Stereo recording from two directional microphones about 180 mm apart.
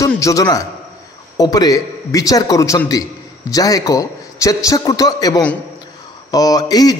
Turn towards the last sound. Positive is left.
turn(degrees=20)  # may be behind; listen again after turning